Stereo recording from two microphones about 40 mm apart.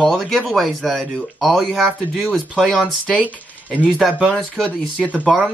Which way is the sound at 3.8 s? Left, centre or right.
Centre.